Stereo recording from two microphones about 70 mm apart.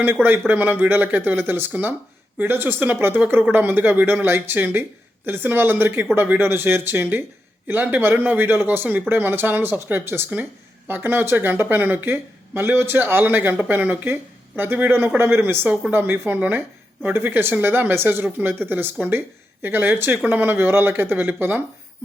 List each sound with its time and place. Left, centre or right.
0.0 s speech: right